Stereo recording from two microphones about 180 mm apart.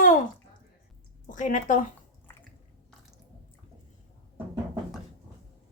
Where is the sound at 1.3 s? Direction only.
45° left (ahead or behind).